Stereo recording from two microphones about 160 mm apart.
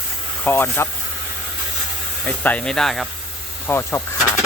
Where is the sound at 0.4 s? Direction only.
15° left (ahead or behind).